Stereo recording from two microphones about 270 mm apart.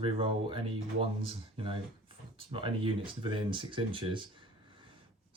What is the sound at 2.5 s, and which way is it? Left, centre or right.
Speech, centre.